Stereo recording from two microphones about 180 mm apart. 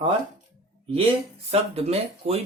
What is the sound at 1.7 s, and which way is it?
Speech, 35° right (ahead or behind).